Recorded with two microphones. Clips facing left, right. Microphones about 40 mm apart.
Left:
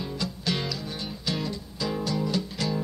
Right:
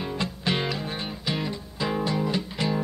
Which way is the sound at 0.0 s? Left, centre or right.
Right.